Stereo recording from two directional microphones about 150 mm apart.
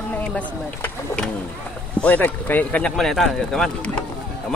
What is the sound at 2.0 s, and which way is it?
Speech, 10° left (ahead or behind).